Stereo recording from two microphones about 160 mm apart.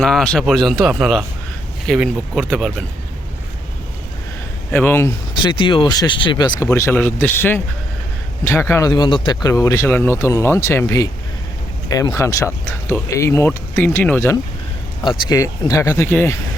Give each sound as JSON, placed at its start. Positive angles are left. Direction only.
{"t": 0.0, "sound": "a man's voice", "side_deg": 5}
{"t": 4.7, "sound": "speech", "side_deg": 10}
{"t": 5.4, "sound": "speech", "side_deg": 30}
{"t": 15.0, "sound": "speech", "side_deg": 25}